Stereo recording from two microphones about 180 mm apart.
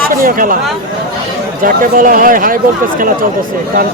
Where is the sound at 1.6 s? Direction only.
50° right (ahead or behind).